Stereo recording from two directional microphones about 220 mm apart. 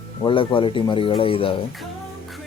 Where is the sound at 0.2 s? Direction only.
25° left (ahead or behind).